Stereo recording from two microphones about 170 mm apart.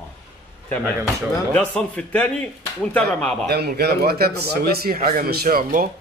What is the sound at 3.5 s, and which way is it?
A man's voice, 70° right (ahead or behind).